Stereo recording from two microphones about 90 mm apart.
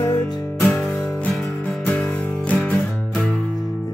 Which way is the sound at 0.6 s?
Centre (ahead or behind).